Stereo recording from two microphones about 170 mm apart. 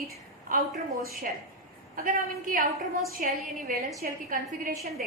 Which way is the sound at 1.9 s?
55° right (ahead or behind).